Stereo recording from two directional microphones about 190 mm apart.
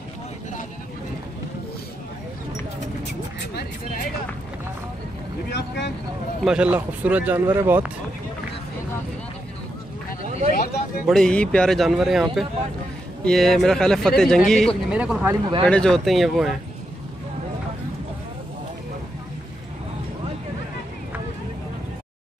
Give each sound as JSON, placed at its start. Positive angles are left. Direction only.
{"t": 3.1, "sound": "vehicle", "side_deg": 60}
{"t": 6.4, "sound": "speech", "side_deg": -5}
{"t": 10.5, "sound": "speech", "side_deg": 50}
{"t": 11.1, "sound": "speech", "side_deg": 5}